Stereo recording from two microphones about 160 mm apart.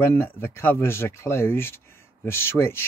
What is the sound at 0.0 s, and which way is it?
Speech, 15° left (ahead or behind).